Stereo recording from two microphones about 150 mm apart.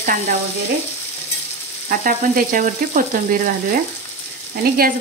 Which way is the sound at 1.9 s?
70° right (ahead or behind).